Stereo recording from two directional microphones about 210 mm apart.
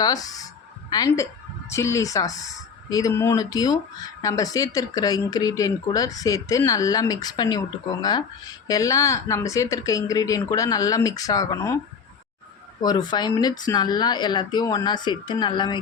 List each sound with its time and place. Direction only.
0.0 s a woman's voice: 15° left (ahead or behind)
12.8 s speech: 20° left (ahead or behind)